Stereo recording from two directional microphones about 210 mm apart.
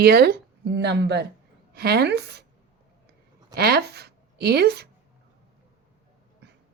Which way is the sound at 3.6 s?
50° right (ahead or behind).